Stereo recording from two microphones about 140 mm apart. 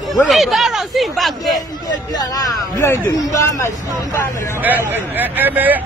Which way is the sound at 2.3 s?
20° left (ahead or behind).